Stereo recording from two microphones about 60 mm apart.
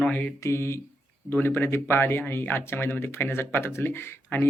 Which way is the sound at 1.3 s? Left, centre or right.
Left.